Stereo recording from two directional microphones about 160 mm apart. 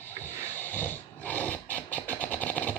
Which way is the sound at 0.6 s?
10° left (ahead or behind).